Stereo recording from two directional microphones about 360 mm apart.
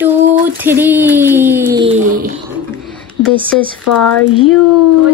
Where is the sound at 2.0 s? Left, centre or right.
Right.